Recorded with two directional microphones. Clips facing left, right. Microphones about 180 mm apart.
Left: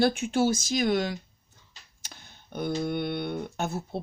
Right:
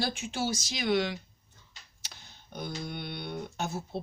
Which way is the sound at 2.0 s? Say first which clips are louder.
Left 4 dB; 55° left (ahead or behind).